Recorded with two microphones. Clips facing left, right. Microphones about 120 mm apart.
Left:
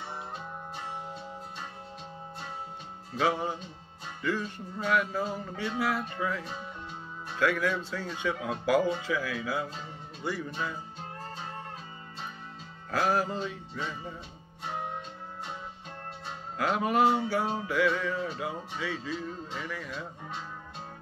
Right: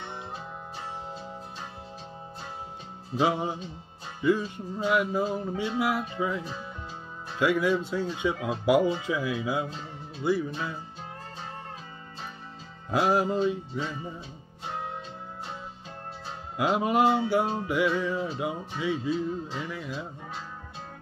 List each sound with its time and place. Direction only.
3.2 s music: 15° right (ahead or behind)
12.9 s music: 15° right (ahead or behind)
16.5 s music: 20° right (ahead or behind)